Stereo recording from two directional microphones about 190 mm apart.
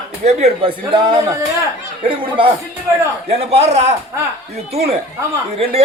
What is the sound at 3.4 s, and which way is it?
Speech, 35° right (ahead or behind).